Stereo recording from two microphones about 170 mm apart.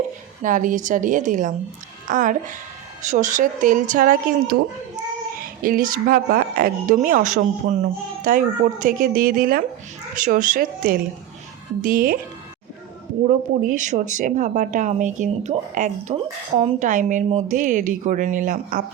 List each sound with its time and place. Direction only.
0.4 s speech: 50° right (ahead or behind)
13.2 s speech: 50° right (ahead or behind)